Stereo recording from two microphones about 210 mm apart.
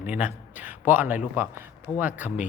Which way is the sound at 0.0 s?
5° right (ahead or behind).